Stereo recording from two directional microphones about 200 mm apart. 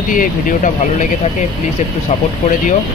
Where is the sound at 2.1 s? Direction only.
35° left (ahead or behind).